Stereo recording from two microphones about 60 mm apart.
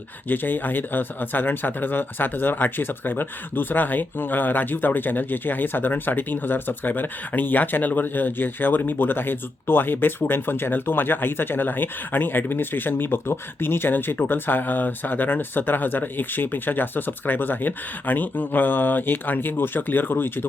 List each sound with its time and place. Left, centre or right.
0.3 s speech: left